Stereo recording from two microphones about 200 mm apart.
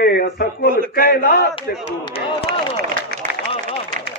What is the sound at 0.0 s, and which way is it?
Speech, 50° left (ahead or behind).